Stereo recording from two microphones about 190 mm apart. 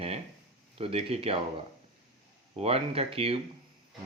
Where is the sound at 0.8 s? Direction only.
30° right (ahead or behind).